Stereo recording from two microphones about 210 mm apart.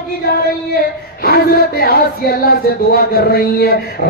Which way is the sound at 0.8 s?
45° left (ahead or behind).